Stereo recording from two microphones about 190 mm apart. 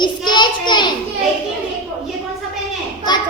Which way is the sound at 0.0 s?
25° left (ahead or behind).